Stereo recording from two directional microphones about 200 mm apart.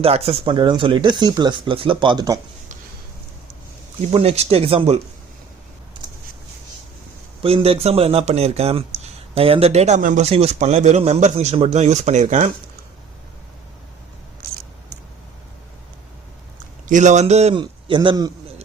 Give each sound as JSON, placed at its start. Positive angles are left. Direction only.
{"t": 0.0, "sound": "speech", "side_deg": -30}
{"t": 4.1, "sound": "speech", "side_deg": -30}
{"t": 7.4, "sound": "speech", "side_deg": -30}
{"t": 14.4, "sound": "a sound", "side_deg": -50}
{"t": 16.8, "sound": "speech", "side_deg": -40}